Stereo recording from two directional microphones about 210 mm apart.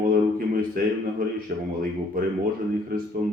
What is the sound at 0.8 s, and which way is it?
Speech, 45° right (ahead or behind).